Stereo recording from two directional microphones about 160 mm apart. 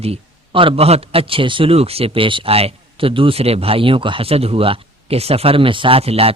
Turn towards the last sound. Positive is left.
turn(degrees=-40)  # may be behind; listen again after turning